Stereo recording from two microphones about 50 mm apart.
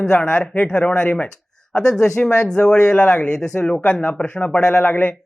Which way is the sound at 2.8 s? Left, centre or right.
Left.